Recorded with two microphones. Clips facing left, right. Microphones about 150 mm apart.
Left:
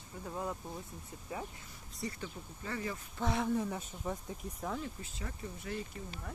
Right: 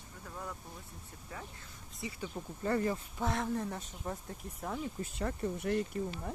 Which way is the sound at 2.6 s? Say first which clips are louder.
Right 8 dB; 45° right (ahead or behind).